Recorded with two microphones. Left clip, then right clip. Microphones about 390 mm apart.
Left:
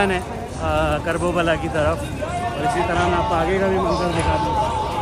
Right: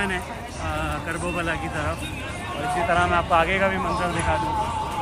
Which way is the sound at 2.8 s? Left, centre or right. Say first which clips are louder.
Left 1 dB; centre.